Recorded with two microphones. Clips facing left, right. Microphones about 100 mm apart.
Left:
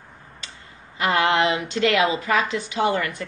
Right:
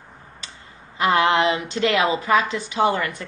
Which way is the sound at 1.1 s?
25° right (ahead or behind).